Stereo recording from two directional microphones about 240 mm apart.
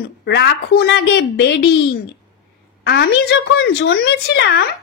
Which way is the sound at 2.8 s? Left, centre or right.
Left.